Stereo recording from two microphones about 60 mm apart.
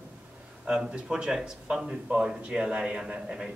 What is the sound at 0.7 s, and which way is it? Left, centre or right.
Speech, centre.